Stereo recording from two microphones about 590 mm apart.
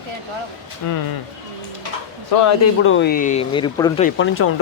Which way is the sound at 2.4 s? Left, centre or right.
Left.